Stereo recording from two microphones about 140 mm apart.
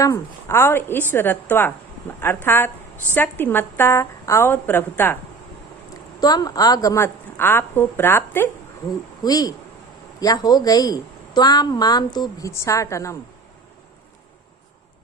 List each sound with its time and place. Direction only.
0.0 s a woman's voice: 20° left (ahead or behind)
5.9 s a woman's voice: 30° left (ahead or behind)
9.2 s a woman's voice: 25° left (ahead or behind)